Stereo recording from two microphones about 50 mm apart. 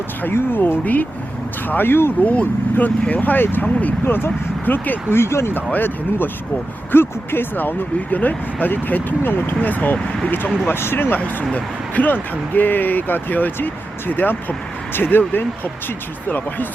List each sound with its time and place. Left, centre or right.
0.2 s speech: left
2.2 s speech: left
4.0 s speech: left
5.7 s speech: left
10.7 s speech: left
11.5 s speech: left